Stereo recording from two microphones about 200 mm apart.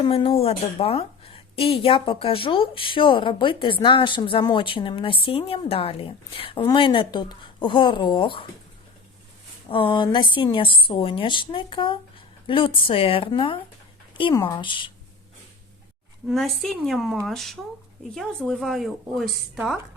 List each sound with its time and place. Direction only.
0.0 s a woman's voice: 25° left (ahead or behind)
9.6 s a woman's voice: 25° left (ahead or behind)
16.3 s speech: centre (ahead or behind)